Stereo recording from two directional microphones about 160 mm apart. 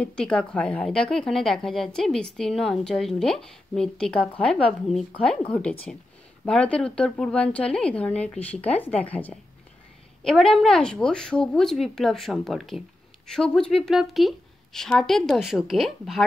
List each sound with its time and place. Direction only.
0.0 s a woman's voice: 5° left (ahead or behind)